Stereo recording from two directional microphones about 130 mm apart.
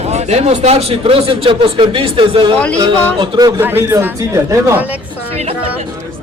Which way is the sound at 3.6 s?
15° right (ahead or behind).